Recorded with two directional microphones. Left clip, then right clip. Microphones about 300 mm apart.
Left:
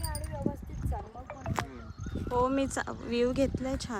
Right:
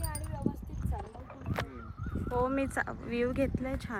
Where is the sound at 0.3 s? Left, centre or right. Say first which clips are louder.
Left 2 dB; centre.